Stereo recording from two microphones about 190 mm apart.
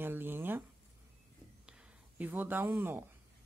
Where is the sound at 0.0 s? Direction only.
10° right (ahead or behind).